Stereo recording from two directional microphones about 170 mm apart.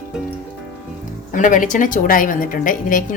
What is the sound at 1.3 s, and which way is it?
A woman's voice, 50° left (ahead or behind).